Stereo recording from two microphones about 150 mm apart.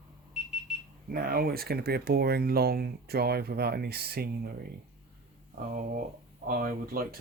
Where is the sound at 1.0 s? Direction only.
80° right.